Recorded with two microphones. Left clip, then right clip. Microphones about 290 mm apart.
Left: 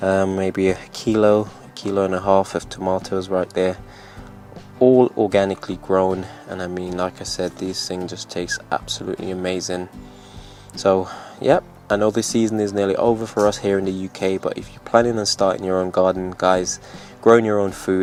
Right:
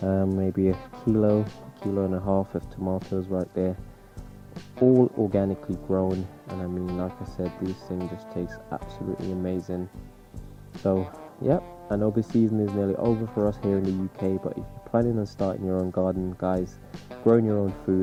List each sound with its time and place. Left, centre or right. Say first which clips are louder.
0.0 s speech: left 8 dB; centre
2.9 s speech: left 8 dB; centre
4.9 s speech: left 7 dB; left
5.3 s speech: left 8 dB; centre
11.4 s speech: left 9 dB; centre
13.0 s speech: left 8 dB; centre